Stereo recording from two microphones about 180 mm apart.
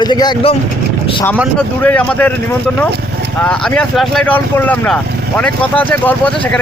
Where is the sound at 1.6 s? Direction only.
10° left (ahead or behind).